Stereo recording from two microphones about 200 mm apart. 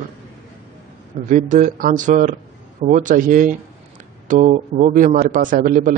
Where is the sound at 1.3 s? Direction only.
40° right (ahead or behind).